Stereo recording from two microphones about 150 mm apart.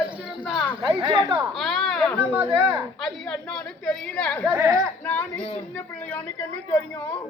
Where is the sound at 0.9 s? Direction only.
30° right (ahead or behind).